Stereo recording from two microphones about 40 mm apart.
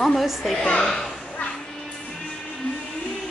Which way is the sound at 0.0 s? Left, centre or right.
Centre.